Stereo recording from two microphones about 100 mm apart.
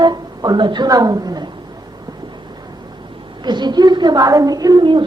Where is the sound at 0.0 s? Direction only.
45° right (ahead or behind).